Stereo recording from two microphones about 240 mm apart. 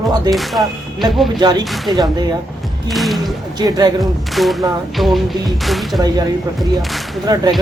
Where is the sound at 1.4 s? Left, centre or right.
Centre.